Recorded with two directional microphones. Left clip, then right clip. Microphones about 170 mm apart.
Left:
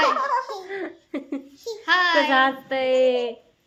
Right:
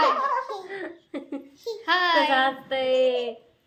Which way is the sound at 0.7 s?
45° left (ahead or behind).